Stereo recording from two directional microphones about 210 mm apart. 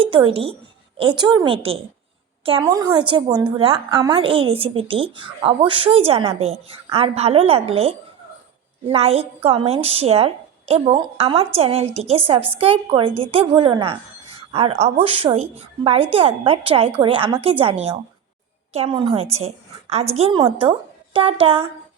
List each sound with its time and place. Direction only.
0.0 s a woman's voice: 25° right (ahead or behind)